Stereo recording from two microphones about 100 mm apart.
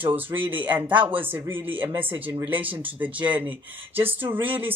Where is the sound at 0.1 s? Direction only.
20° right (ahead or behind).